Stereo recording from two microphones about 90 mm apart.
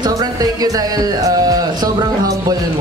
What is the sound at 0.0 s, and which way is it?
Music, 45° right (ahead or behind).